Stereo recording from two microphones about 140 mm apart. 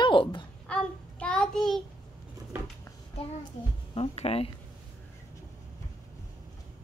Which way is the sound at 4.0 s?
45° left (ahead or behind).